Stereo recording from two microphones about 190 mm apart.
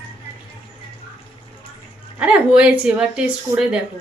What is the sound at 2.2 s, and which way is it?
Speech, 5° right (ahead or behind).